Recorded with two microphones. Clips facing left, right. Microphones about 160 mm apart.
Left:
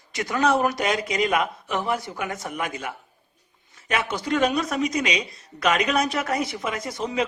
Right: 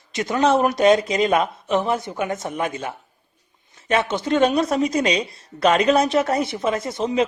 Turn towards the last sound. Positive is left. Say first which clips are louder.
# right 5 dB
turn(degrees=-25)  # may be behind; listen again after turning